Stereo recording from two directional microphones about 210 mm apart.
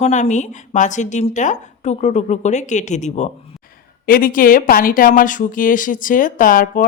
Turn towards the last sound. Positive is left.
turn(degrees=40)  # may be behind; listen again after turning